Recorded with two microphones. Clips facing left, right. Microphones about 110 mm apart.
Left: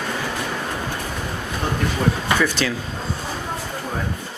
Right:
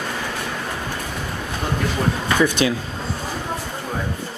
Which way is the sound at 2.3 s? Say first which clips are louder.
Right 3 dB; 15° right (ahead or behind).